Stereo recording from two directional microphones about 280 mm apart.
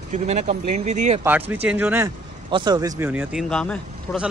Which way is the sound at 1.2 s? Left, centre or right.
Centre.